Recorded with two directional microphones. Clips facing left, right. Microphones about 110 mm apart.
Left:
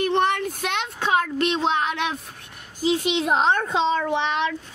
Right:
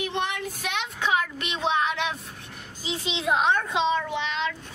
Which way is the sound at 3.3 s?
35° left (ahead or behind).